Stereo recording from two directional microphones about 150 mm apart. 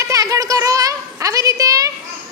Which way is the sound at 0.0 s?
20° right (ahead or behind).